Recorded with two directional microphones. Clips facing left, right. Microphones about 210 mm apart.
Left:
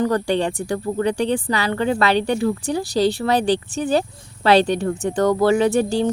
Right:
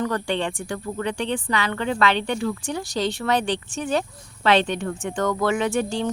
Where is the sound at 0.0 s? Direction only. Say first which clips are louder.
Left 5 dB; 35° left (ahead or behind).